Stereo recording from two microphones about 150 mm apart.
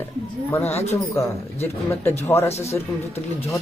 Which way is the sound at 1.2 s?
15° left (ahead or behind).